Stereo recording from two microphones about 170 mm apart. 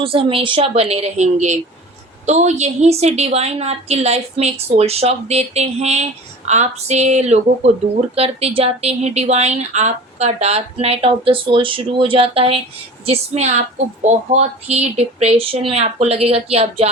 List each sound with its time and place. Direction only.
0.0 s speech: 30° right (ahead or behind)